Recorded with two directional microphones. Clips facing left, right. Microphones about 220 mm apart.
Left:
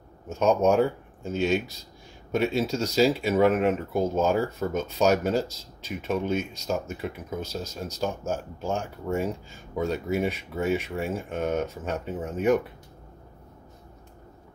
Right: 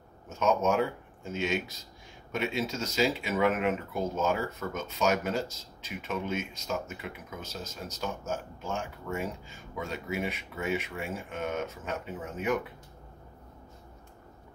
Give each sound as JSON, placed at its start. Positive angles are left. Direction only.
{"t": 0.3, "sound": "speech", "side_deg": 35}